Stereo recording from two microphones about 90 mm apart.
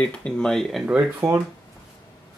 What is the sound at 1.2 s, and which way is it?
Speech, 30° right (ahead or behind).